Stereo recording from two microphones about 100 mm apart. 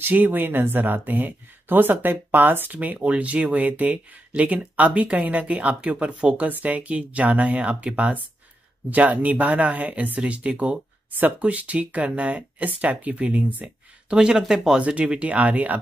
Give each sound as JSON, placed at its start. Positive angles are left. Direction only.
{"t": 0.1, "sound": "speech", "side_deg": -20}